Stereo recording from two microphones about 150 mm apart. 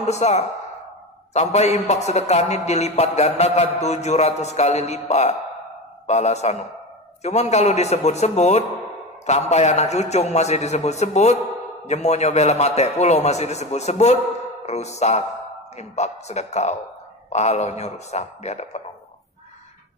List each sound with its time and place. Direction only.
0.0 s speech: 45° left (ahead or behind)